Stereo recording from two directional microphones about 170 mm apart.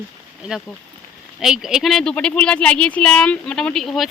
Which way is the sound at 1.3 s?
5° right (ahead or behind).